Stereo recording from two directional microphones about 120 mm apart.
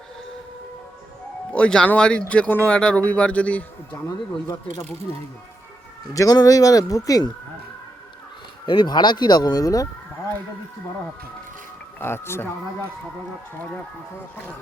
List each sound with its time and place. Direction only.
1.5 s speech: 10° left (ahead or behind)
4.0 s speech: 30° left (ahead or behind)
6.1 s speech: 30° left (ahead or behind)
8.6 s speech: 40° left (ahead or behind)
11.9 s speech: 20° left (ahead or behind)